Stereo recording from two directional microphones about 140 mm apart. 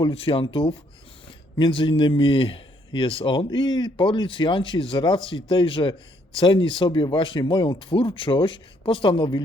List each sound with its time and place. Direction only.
0.0 s a man's voice: 40° left (ahead or behind)